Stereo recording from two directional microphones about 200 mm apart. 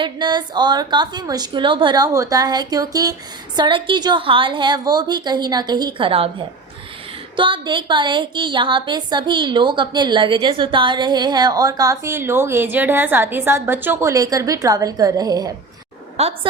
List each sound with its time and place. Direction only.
0.0 s a woman's voice: 20° right (ahead or behind)
7.3 s a woman's voice: 25° right (ahead or behind)
16.1 s a woman's voice: 30° right (ahead or behind)